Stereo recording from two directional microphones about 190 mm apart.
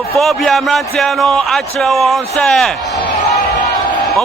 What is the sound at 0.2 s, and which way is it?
Speech, centre (ahead or behind).